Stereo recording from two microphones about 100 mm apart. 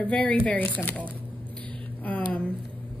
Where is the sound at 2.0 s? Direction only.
15° left (ahead or behind).